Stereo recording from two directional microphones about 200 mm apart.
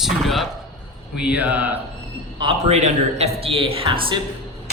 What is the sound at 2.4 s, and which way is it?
A man's voice, 30° right (ahead or behind).